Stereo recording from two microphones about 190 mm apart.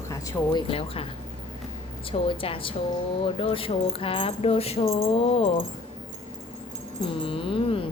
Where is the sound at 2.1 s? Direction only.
30° left (ahead or behind).